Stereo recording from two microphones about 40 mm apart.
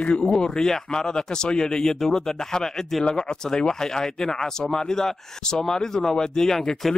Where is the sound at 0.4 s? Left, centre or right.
Centre.